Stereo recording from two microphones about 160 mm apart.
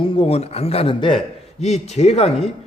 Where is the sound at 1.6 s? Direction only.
45° left (ahead or behind).